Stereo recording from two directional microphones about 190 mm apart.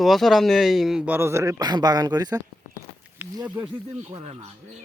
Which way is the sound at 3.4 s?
10° right (ahead or behind).